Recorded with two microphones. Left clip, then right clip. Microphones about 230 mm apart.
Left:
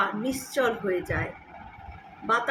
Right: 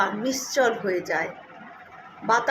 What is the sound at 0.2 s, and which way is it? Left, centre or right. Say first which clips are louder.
Speech: right 4 dB; left.